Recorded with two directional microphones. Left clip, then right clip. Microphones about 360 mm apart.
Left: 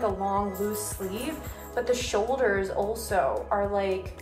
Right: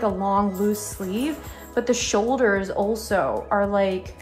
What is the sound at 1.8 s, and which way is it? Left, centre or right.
A woman's voice, right.